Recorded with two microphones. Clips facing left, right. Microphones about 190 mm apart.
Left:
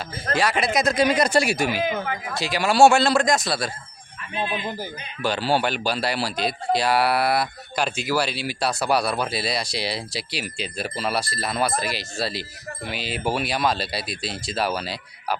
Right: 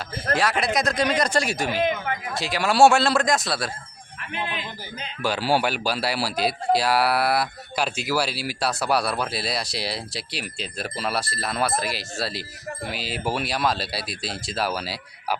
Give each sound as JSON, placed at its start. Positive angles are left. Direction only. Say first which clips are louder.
{"t": 0.3, "sound": "speech", "louder": "left 2 dB", "side_deg": 0}
{"t": 2.3, "sound": "speech", "louder": "left 2 dB", "side_deg": 0}
{"t": 4.2, "sound": "speech", "louder": "left 3 dB", "side_deg": -75}
{"t": 5.2, "sound": "speech", "louder": "even", "side_deg": -5}